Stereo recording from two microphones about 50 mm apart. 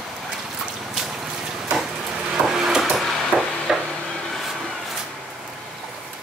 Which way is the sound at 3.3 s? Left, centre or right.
Right.